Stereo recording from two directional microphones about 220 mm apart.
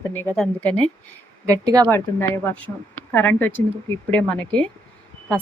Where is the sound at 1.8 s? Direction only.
10° left (ahead or behind).